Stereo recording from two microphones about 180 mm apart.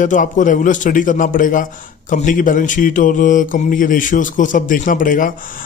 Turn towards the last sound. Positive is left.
turn(degrees=50)  # may be behind; listen again after turning